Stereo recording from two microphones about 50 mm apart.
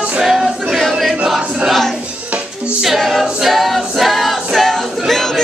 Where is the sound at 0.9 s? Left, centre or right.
Centre.